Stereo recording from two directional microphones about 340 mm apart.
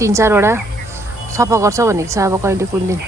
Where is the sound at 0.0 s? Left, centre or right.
Centre.